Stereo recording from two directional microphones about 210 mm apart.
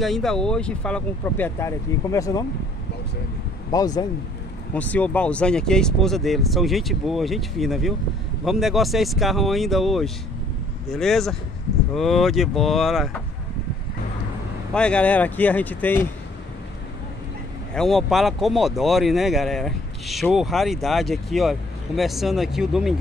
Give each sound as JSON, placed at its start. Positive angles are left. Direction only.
{"t": 0.0, "sound": "speech", "side_deg": 0}
{"t": 3.7, "sound": "speech", "side_deg": 20}
{"t": 4.7, "sound": "speech", "side_deg": 5}
{"t": 14.7, "sound": "speech", "side_deg": 5}
{"t": 17.7, "sound": "speech", "side_deg": 0}